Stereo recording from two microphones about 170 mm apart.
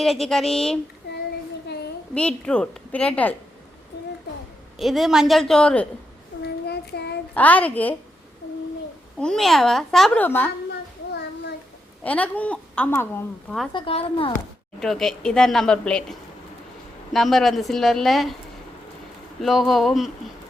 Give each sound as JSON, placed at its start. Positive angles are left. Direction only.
{"t": 0.0, "sound": "speech", "side_deg": 0}
{"t": 2.1, "sound": "a woman's voice", "side_deg": 5}
{"t": 4.8, "sound": "speech", "side_deg": 0}
{"t": 6.4, "sound": "child singing", "side_deg": 75}
{"t": 7.3, "sound": "a woman's voice", "side_deg": 10}
{"t": 9.1, "sound": "speech", "side_deg": 5}
{"t": 12.0, "sound": "a woman's voice", "side_deg": 10}
{"t": 13.7, "sound": "speech", "side_deg": 30}
{"t": 14.8, "sound": "speech", "side_deg": 0}
{"t": 19.4, "sound": "speech", "side_deg": 0}